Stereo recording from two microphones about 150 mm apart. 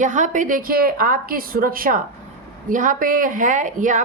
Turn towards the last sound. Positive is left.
turn(degrees=-60)  # may be behind; listen again after turning